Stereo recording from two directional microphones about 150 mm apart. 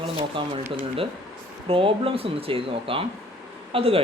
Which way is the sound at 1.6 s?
35° right (ahead or behind).